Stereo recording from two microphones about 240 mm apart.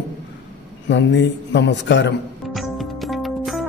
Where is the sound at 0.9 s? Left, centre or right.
Left.